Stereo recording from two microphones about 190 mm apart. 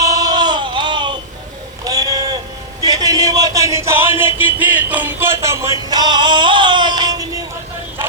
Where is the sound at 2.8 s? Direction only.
20° right (ahead or behind).